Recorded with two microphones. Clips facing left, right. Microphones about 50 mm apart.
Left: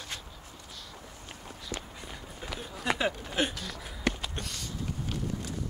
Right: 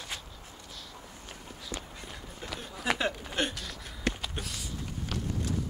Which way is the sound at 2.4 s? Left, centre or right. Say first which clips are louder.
Even; centre.